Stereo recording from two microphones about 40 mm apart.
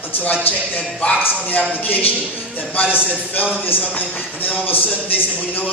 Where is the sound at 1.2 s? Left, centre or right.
Left.